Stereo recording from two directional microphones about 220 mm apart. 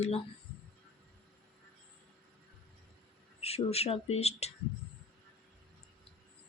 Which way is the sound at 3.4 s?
30° left (ahead or behind).